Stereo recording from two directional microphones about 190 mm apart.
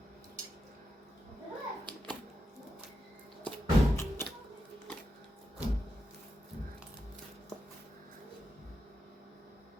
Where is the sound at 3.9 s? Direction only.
15° left (ahead or behind).